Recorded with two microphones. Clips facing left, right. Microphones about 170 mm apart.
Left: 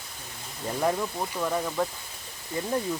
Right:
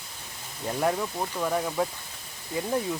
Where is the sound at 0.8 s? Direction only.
5° right (ahead or behind).